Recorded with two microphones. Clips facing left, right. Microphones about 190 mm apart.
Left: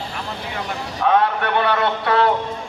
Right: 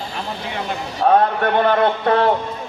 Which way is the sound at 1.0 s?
40° right (ahead or behind).